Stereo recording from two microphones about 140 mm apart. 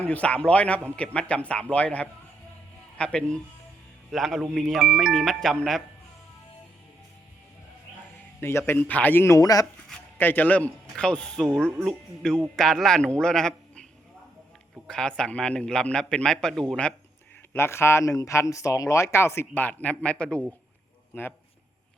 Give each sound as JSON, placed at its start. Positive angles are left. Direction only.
{"t": 0.0, "sound": "a man's voice", "side_deg": 10}
{"t": 8.4, "sound": "speech", "side_deg": 15}
{"t": 10.2, "sound": "a man's voice", "side_deg": 15}
{"t": 14.8, "sound": "a man's voice", "side_deg": 5}
{"t": 17.5, "sound": "speech", "side_deg": 20}